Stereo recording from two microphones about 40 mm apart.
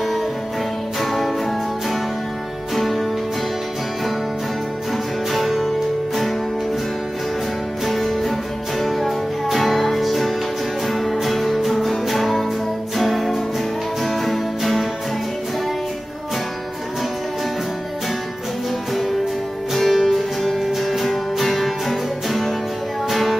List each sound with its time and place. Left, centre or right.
2.7 s music: centre
5.3 s music: centre
7.8 s music: centre
19.7 s music: centre